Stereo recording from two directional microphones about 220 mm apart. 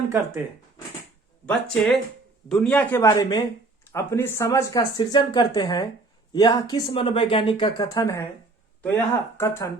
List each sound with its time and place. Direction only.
1.5 s speech: 5° left (ahead or behind)